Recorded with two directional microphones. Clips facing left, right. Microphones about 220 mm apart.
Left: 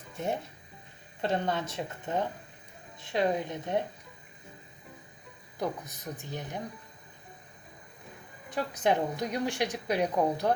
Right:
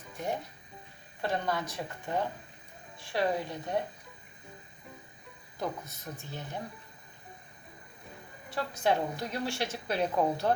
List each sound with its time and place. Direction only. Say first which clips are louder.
1.2 s speech: left 2 dB; 25° left (ahead or behind)
5.5 s a woman's voice: left 2 dB; 15° left (ahead or behind)
8.4 s a woman's voice: left 1 dB; 20° left (ahead or behind)